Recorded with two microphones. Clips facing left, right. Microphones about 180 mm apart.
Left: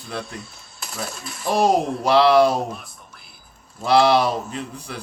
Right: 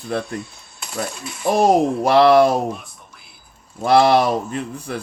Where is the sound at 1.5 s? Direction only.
50° right (ahead or behind).